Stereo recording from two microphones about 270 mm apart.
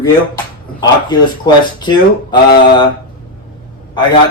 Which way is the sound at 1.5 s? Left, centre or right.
Centre.